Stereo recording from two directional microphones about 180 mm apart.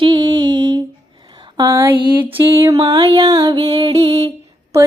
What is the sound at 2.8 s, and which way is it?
Music, 30° right (ahead or behind).